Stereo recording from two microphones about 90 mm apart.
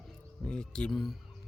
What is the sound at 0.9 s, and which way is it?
Speech, centre (ahead or behind).